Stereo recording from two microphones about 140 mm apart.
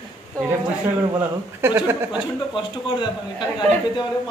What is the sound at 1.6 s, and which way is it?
Speech, 15° right (ahead or behind).